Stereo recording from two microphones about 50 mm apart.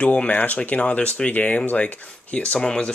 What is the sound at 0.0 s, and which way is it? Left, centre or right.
Speech, left.